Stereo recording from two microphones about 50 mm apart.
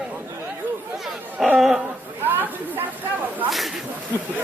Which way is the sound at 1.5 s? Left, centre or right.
Centre.